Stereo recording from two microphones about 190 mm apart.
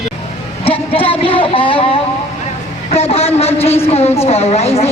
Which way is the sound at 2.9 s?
30° left (ahead or behind).